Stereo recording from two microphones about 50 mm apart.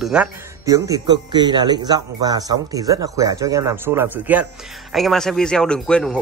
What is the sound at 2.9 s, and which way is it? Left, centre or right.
Speech, right.